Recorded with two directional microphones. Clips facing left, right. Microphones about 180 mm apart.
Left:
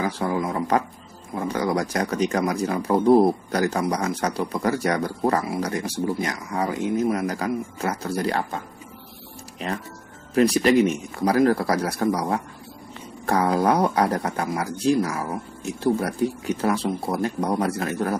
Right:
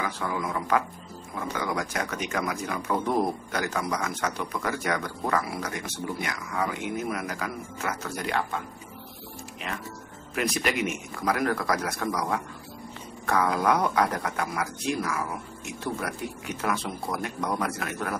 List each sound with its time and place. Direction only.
0.0 s speech: 35° left (ahead or behind)
9.6 s speech: 35° left (ahead or behind)